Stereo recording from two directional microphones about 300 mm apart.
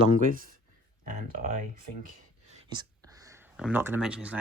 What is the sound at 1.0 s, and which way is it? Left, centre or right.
Speech, right.